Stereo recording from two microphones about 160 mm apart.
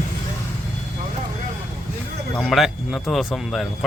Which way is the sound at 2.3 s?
Centre (ahead or behind).